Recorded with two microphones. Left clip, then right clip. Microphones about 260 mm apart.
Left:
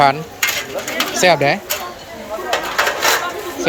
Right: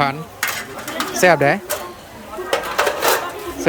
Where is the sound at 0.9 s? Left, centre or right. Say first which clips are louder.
Even; centre.